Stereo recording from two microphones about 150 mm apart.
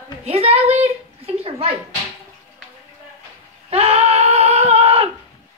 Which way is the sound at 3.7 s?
45° right (ahead or behind).